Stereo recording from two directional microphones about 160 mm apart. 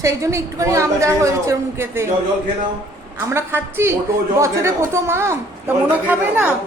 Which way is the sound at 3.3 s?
15° right (ahead or behind).